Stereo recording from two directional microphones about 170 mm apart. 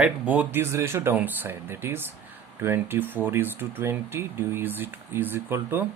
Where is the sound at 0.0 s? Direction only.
10° right (ahead or behind).